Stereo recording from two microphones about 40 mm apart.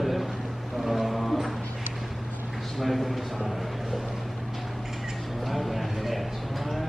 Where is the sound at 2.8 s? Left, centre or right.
Centre.